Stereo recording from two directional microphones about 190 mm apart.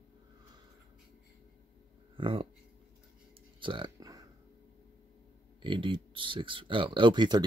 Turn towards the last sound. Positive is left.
turn(degrees=-25)  # may be behind; listen again after turning